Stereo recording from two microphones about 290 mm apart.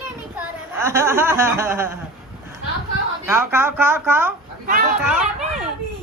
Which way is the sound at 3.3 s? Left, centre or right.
Centre.